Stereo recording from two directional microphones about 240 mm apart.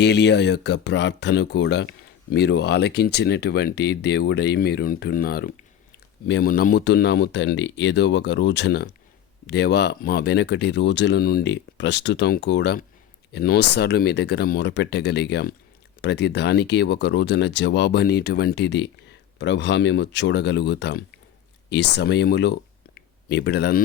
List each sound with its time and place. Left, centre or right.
0.0 s speech: left